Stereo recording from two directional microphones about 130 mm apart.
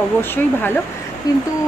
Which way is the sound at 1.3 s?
30° left (ahead or behind).